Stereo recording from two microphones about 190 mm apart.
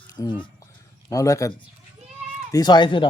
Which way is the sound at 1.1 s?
15° left (ahead or behind).